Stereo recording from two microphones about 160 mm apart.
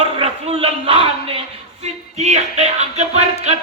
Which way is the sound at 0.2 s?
35° right (ahead or behind).